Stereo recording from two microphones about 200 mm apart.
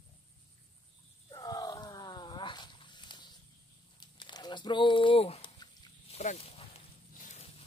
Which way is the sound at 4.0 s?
20° left (ahead or behind).